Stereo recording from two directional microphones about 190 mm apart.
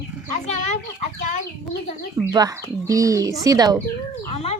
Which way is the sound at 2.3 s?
20° right (ahead or behind).